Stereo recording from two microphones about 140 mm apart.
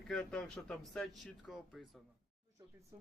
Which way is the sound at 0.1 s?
5° left (ahead or behind).